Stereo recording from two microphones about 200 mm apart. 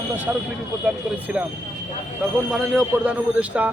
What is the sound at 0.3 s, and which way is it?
A man's voice, 10° right (ahead or behind).